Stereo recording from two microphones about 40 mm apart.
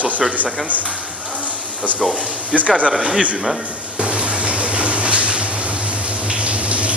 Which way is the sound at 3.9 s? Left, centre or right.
Right.